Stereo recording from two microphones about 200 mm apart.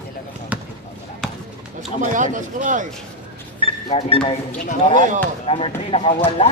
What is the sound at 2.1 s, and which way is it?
Speech, 40° right (ahead or behind).